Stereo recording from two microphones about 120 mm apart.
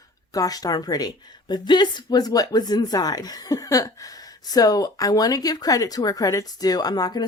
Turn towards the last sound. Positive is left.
turn(degrees=35)  # may be behind; listen again after turning